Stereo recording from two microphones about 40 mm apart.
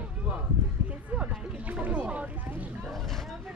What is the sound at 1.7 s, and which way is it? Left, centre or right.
Speech, right.